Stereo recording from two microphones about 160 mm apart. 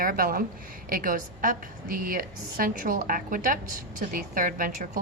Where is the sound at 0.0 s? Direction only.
60° right (ahead or behind).